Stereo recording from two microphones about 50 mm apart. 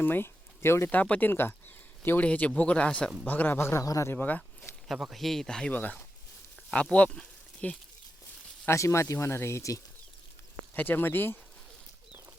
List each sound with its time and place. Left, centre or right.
0.0 s speech: left
0.9 s speech: left
1.3 s a sound: left
2.2 s speech: left
3.2 s speech: left
3.5 s a man's voice: left
3.8 s speech: left
4.2 s speech: left
5.1 s speech: centre
5.7 s speech: left
7.0 s speech: left
8.7 s speech: left
10.8 s speech: left